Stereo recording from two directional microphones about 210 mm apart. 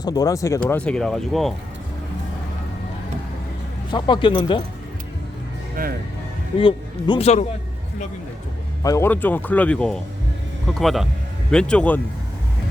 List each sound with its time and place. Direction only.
0.0 s speech: 20° left (ahead or behind); by 1.5 s centre (ahead or behind)
3.9 s speech: 20° left (ahead or behind)
5.8 s speech: 40° right (ahead or behind)
6.6 s speech: 25° left (ahead or behind)
8.8 s speech: 15° left (ahead or behind)